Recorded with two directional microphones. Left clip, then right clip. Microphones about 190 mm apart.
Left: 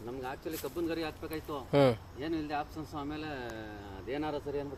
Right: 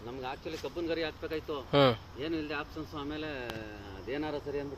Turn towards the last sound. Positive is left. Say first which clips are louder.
# even
turn(degrees=20)  # may be behind; listen again after turning